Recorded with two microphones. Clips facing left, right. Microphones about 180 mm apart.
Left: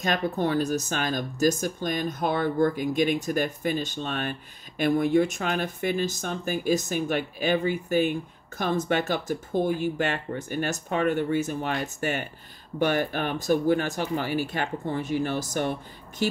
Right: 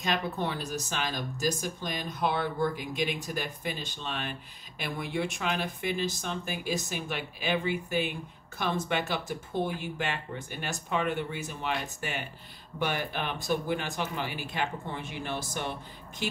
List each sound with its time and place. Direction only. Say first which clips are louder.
0.0 s speech: left 5 dB; 45° left (ahead or behind)